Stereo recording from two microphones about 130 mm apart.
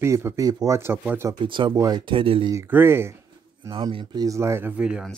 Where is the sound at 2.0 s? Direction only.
40° right (ahead or behind).